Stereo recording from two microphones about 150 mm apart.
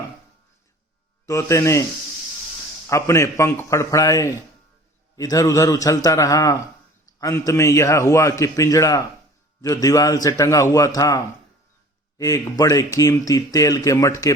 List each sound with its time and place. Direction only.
1.3 s speech: 20° left (ahead or behind)
2.9 s speech: 20° left (ahead or behind)